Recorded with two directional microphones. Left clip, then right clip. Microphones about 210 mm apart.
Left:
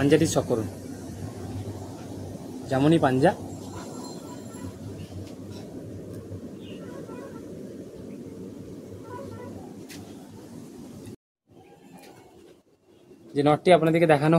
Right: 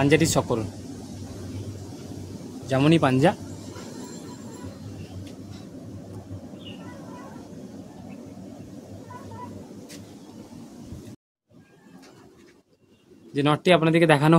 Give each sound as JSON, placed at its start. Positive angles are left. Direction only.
{"t": 0.0, "sound": "a man's voice", "side_deg": -50}
{"t": 2.7, "sound": "a man's voice", "side_deg": -45}
{"t": 13.3, "sound": "a man's voice", "side_deg": -45}